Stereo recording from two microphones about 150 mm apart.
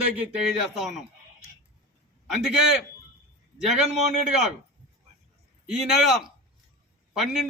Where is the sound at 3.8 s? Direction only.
50° right (ahead or behind).